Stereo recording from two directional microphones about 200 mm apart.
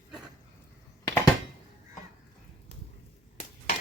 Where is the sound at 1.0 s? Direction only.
20° left (ahead or behind).